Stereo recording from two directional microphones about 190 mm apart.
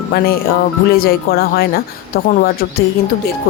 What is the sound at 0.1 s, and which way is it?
Speech, 55° left (ahead or behind).